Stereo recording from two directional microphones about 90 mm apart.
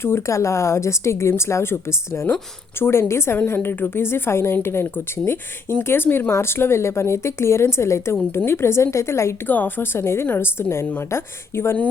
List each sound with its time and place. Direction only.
0.0 s a woman's voice: 30° left (ahead or behind)
9.5 s a woman's voice: 20° left (ahead or behind)